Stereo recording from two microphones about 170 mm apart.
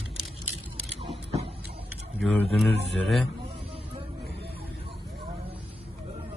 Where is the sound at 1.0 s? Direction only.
35° right (ahead or behind).